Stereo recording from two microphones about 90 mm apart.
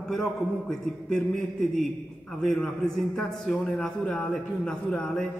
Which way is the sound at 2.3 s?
5° left (ahead or behind).